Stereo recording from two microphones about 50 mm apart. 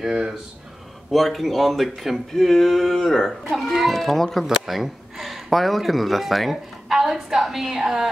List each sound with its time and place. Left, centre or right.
0.0 s speech: centre
1.1 s speech: centre